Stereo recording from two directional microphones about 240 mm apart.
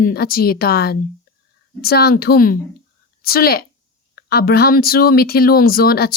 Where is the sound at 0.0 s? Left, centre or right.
Left.